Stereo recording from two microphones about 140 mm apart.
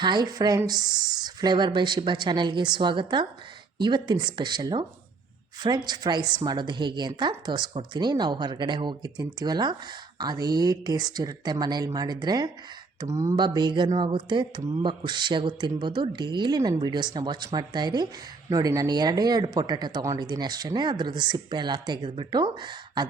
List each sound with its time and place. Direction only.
0.0 s a woman's voice: 30° right (ahead or behind)